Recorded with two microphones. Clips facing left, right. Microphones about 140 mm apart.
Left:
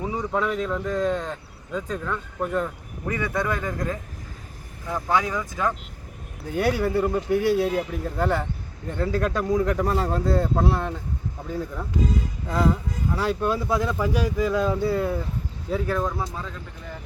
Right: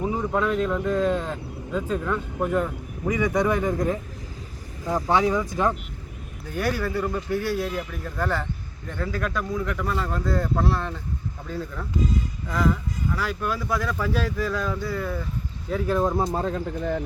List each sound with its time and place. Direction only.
0.0 s speech: centre (ahead or behind); by 5.7 s 20° right (ahead or behind)
6.5 s speech: 20° left (ahead or behind)
12.5 s speech: 30° left (ahead or behind)
16.0 s speech: 45° right (ahead or behind)